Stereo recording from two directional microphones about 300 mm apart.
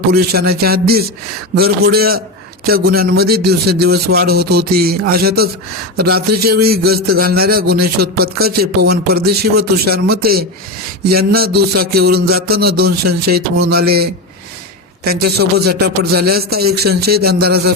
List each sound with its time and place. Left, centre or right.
0.1 s a man's voice: right